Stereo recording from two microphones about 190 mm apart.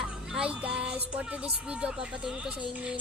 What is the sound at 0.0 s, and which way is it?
Speech, 5° right (ahead or behind).